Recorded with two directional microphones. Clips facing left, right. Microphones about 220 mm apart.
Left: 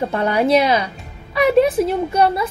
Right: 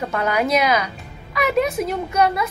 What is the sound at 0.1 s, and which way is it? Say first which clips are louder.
A woman's voice: left 3 dB; 30° left (ahead or behind).